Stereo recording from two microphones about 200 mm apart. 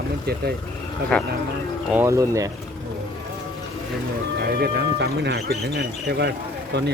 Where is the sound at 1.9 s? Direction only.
10° right (ahead or behind).